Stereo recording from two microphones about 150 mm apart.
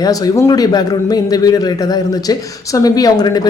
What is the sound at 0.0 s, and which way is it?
A man's voice, 25° left (ahead or behind).